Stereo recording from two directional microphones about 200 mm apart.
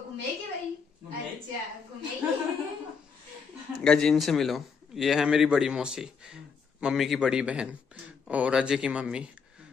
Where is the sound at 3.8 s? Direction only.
Centre (ahead or behind).